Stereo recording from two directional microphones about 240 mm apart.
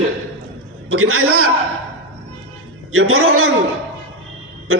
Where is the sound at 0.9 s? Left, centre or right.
Right.